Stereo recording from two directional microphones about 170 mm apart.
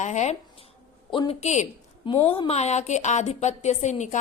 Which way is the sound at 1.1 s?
30° left (ahead or behind).